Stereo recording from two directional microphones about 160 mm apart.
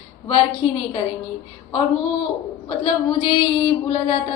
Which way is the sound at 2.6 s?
35° left (ahead or behind).